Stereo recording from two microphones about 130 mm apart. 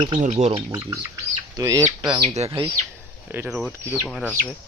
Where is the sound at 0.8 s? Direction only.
25° right (ahead or behind).